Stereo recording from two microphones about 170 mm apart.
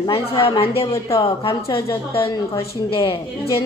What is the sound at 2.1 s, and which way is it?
A woman's voice, 35° left (ahead or behind).